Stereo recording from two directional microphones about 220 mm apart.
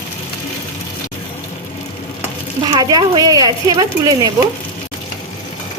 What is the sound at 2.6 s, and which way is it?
A woman's voice, 20° right (ahead or behind).